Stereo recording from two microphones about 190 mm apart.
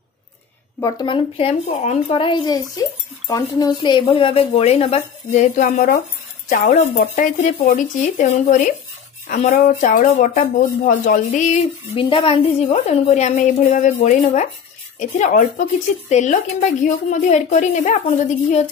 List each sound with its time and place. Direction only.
0.7 s a woman's voice: 20° left (ahead or behind); by 12.0 s 40° left (ahead or behind)
12.0 s a woman's voice: 25° left (ahead or behind)